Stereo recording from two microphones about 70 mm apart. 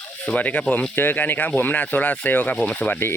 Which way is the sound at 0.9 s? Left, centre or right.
Left.